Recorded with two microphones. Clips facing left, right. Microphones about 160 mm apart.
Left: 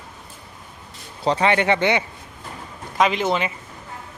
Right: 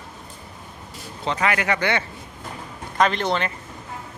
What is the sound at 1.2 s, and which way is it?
Speech, 30° left (ahead or behind).